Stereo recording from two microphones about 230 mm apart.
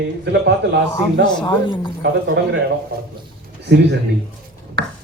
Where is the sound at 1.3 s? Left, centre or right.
Centre.